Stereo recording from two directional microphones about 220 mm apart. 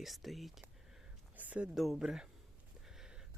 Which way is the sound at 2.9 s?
5° right (ahead or behind).